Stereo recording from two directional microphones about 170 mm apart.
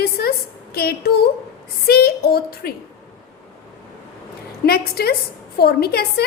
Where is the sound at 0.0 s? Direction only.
65° left (ahead or behind).